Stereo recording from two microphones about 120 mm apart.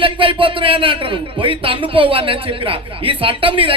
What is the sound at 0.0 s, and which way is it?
Speech, 45° right (ahead or behind).